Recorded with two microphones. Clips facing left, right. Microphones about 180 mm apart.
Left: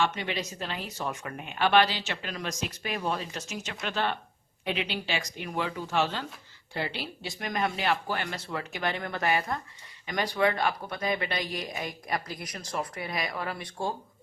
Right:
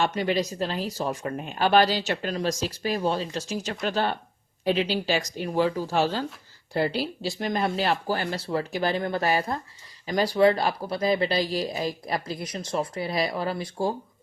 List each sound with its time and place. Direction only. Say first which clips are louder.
0.0 s speech: right 5 dB; 40° right (ahead or behind)